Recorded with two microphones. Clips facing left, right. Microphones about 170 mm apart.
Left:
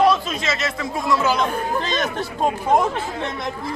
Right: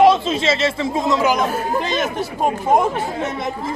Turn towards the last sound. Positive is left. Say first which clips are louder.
# right 3 dB
turn(degrees=-5)  # may be behind; listen again after turning